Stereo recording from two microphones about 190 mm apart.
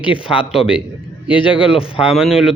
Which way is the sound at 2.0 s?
5° right (ahead or behind).